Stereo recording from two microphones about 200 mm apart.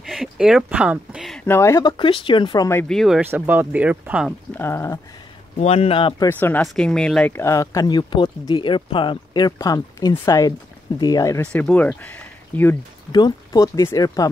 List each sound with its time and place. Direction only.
0.0 s a sound: centre (ahead or behind)
1.4 s speech: 15° left (ahead or behind)
3.2 s speech: 10° right (ahead or behind)
4.6 s speech: 15° left (ahead or behind)
5.6 s speech: 30° left (ahead or behind)
6.2 s speech: 10° left (ahead or behind)
13.1 s speech: 20° left (ahead or behind)